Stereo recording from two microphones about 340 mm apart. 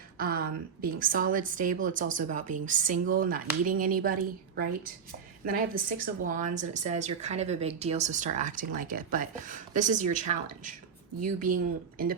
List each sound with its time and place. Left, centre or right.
0.2 s speech: right